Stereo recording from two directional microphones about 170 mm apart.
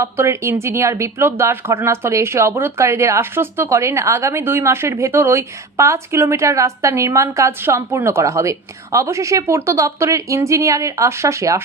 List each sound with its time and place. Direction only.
0.0 s speech: 15° right (ahead or behind)